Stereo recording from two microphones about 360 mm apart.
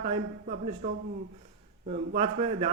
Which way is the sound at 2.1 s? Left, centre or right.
Centre.